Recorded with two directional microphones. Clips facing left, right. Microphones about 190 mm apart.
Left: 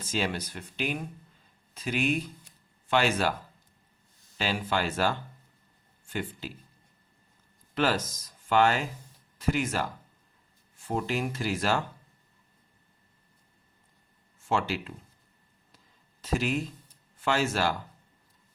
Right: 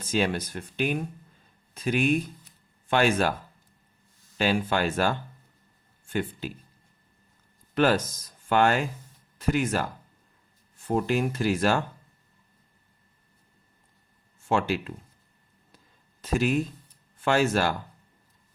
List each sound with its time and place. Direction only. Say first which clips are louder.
0.1 s speech: right 5 dB; 50° right (ahead or behind)
4.4 s speech: right 5 dB; 55° right (ahead or behind)
7.8 s speech: right 5 dB; 55° right (ahead or behind)
10.8 s speech: right 5 dB; 50° right (ahead or behind)
14.4 s speech: right 3 dB; 50° right (ahead or behind)
16.2 s speech: right 4 dB; 50° right (ahead or behind)